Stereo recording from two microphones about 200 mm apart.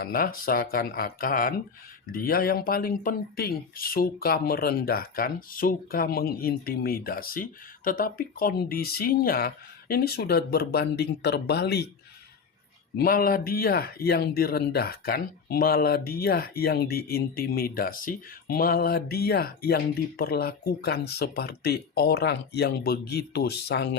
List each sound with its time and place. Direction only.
0.0 s speech: 45° left (ahead or behind)
13.0 s speech: 45° left (ahead or behind)